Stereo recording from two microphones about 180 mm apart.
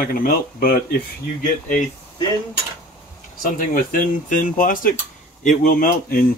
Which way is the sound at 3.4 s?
50° left (ahead or behind).